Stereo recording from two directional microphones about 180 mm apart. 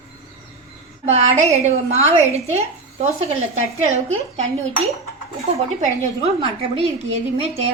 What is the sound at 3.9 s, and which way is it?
Speech, 40° right (ahead or behind).